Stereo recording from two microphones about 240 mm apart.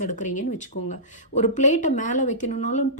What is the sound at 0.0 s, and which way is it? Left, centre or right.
A woman's voice, left.